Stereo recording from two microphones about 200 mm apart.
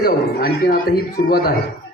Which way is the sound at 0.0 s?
45° left (ahead or behind).